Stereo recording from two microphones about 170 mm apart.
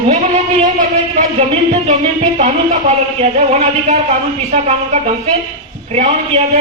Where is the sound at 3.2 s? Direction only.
40° right (ahead or behind).